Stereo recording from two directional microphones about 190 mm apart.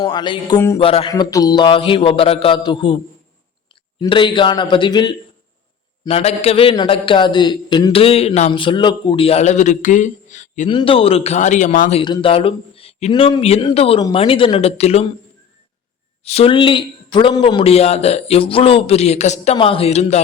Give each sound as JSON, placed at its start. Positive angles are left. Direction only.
{"t": 0.0, "sound": "a man's voice", "side_deg": 25}
{"t": 1.1, "sound": "a man's voice", "side_deg": 20}
{"t": 4.0, "sound": "a man's voice", "side_deg": 25}
{"t": 10.7, "sound": "a man's voice", "side_deg": 25}
{"t": 16.2, "sound": "a man's voice", "side_deg": 30}